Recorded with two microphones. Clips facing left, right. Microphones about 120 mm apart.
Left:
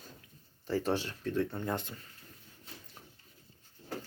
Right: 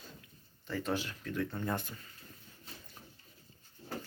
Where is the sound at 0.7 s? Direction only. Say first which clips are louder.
Left 4 dB; 35° left (ahead or behind).